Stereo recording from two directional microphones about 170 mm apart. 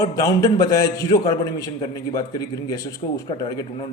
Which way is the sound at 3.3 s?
30° left (ahead or behind).